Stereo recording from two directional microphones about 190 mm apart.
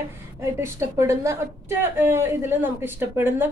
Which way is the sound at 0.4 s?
15° right (ahead or behind).